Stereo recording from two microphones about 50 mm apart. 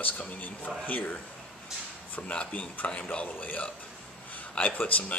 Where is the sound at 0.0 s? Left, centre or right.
Left.